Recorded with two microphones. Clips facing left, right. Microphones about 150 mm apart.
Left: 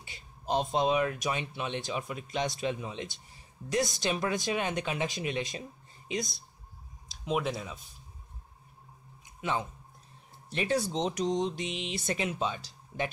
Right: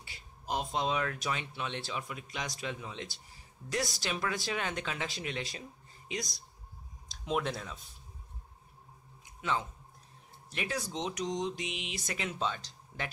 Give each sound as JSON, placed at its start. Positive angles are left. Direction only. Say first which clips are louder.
{"t": 0.0, "sound": "a man's voice", "louder": "left 5 dB", "side_deg": 25}
{"t": 7.2, "sound": "speech", "louder": "left 2 dB", "side_deg": 5}
{"t": 9.4, "sound": "speech", "louder": "left 2 dB", "side_deg": 20}
{"t": 10.5, "sound": "speech", "louder": "left 7 dB", "side_deg": 30}
{"t": 12.3, "sound": "speech", "louder": "left 2 dB", "side_deg": 15}